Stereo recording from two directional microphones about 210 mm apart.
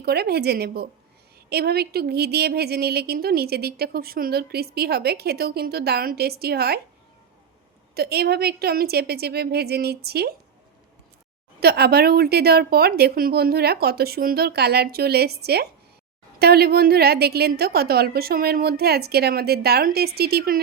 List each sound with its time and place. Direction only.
0.0 s a woman's voice: 50° right (ahead or behind)
7.9 s a woman's voice: 50° right (ahead or behind)
11.6 s a woman's voice: 50° right (ahead or behind)